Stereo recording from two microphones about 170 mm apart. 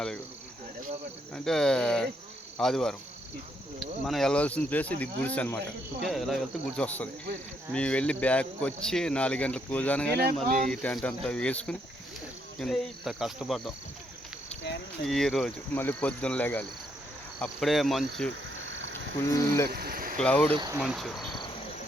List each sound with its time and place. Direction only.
1.3 s cricket: 5° left (ahead or behind)
4.0 s speech: centre (ahead or behind)
6.0 s cricket: centre (ahead or behind)
7.7 s speech: 5° left (ahead or behind)
10.7 s cricket: 5° left (ahead or behind)
15.0 s speech: centre (ahead or behind)
17.4 s cricket: centre (ahead or behind)
18.6 s a sound: 90° right
19.1 s speech: 15° left (ahead or behind)
19.7 s a sound: 65° right (ahead or behind)
20.1 s speech: 5° left (ahead or behind)
20.7 s cricket: centre (ahead or behind)